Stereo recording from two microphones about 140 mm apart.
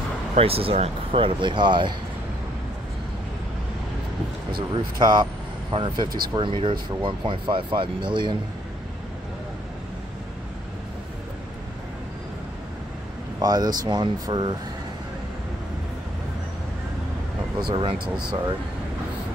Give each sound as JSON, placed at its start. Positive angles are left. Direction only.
{"t": 0.4, "sound": "speech", "side_deg": -45}
{"t": 4.6, "sound": "speech", "side_deg": -35}
{"t": 13.4, "sound": "speech", "side_deg": -30}
{"t": 17.6, "sound": "speech", "side_deg": -35}